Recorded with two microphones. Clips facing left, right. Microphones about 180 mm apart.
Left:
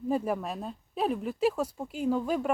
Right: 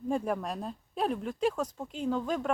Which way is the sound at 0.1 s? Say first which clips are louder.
Left 1 dB; 5° left (ahead or behind).